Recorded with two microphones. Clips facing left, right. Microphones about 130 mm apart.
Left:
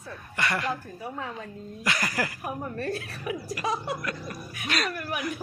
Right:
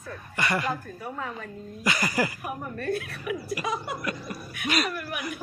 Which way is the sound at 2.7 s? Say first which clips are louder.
Right 2 dB; 30° left (ahead or behind).